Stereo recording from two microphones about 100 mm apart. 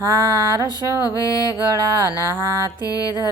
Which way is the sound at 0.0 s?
35° right (ahead or behind).